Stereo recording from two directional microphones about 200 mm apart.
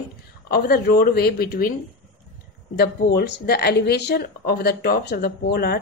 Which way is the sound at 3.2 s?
55° left (ahead or behind).